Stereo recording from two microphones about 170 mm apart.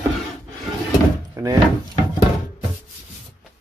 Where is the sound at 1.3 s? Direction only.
20° right (ahead or behind).